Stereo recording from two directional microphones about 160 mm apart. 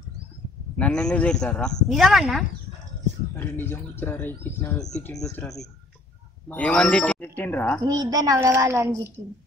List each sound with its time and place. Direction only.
0.7 s speech: 5° left (ahead or behind)
3.3 s speech: 15° left (ahead or behind)
6.5 s speech: 5° left (ahead or behind)
7.9 s a woman's voice: 25° right (ahead or behind)